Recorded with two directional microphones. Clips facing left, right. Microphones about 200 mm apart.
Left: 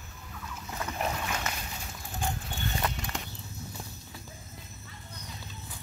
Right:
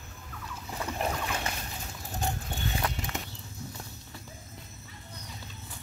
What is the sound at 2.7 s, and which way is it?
Horse, centre (ahead or behind).